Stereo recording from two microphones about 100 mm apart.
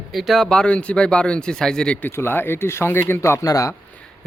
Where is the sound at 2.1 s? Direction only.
25° left (ahead or behind).